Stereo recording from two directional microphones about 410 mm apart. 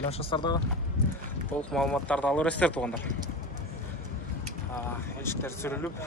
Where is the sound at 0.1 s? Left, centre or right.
Centre.